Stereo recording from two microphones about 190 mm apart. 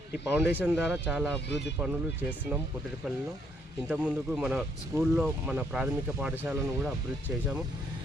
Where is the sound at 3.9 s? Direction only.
5° right (ahead or behind).